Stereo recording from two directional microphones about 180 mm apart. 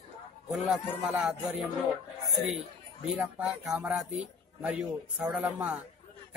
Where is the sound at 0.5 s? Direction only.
5° right (ahead or behind).